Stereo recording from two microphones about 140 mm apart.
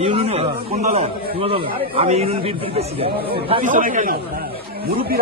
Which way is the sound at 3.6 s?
70° right (ahead or behind).